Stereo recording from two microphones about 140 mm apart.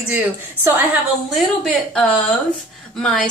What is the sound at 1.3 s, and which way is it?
A woman's voice, centre (ahead or behind).